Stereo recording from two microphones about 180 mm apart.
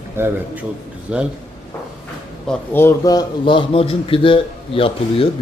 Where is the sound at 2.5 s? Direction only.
15° left (ahead or behind); by 5.3 s 30° left (ahead or behind).